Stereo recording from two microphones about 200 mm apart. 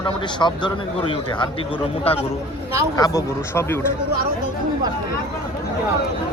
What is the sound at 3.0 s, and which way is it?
Speech, 15° left (ahead or behind).